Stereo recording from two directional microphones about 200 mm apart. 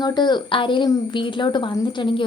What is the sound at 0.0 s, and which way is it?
A woman's voice, 20° left (ahead or behind).